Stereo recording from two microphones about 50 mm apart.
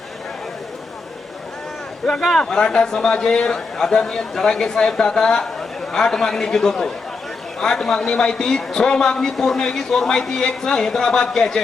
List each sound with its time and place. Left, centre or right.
2.0 s speech: centre
2.4 s a man's voice: centre